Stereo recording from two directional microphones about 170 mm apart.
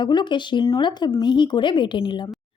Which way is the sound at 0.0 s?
25° left (ahead or behind).